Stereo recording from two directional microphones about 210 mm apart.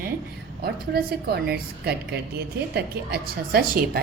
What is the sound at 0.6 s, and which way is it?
A woman's voice, 50° right (ahead or behind).